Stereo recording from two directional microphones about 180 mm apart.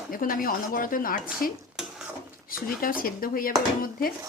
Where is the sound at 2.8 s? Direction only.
50° left (ahead or behind).